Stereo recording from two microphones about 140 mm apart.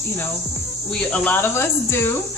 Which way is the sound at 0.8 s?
10° left (ahead or behind).